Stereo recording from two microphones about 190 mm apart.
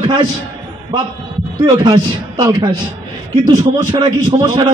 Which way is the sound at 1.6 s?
20° right (ahead or behind).